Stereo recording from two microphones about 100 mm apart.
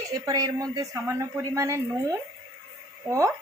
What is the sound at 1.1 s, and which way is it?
A woman's voice, 25° right (ahead or behind).